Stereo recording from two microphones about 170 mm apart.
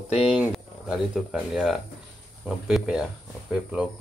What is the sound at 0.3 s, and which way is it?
Speech, 5° right (ahead or behind).